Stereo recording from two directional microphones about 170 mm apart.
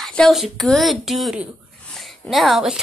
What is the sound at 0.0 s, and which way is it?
Speech, centre (ahead or behind).